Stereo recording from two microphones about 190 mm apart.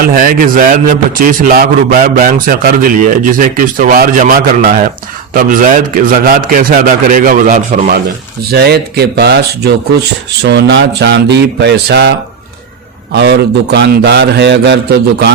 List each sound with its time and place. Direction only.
0.0 s a man's voice: 50° right (ahead or behind)
8.4 s speech: 55° right (ahead or behind)
10.4 s speech: 65° right (ahead or behind)
13.1 s speech: 60° right (ahead or behind)